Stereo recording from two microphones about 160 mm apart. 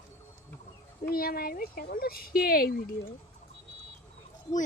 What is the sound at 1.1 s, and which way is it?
A child's voice, 70° left (ahead or behind).